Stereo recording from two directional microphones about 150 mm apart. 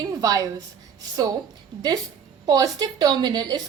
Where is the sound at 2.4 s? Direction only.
25° right (ahead or behind).